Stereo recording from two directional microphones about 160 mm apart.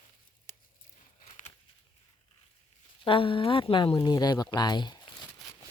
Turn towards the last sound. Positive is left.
turn(degrees=25)  # may be behind; listen again after turning